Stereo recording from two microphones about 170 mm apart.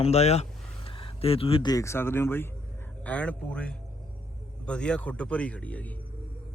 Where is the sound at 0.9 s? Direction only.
30° left (ahead or behind).